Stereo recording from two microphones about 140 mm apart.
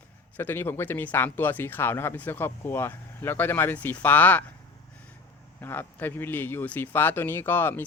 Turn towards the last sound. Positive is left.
turn(degrees=15)  # may be behind; listen again after turning